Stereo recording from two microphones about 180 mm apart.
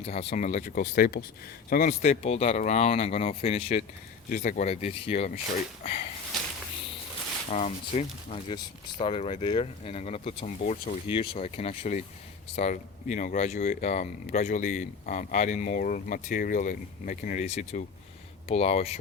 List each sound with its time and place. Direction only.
0.0 s speech: 35° left (ahead or behind)
4.3 s speech: 50° left (ahead or behind)
7.5 s speech: 40° left (ahead or behind)